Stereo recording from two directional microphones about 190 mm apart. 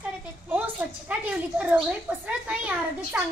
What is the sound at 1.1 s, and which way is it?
A woman's voice, 5° right (ahead or behind).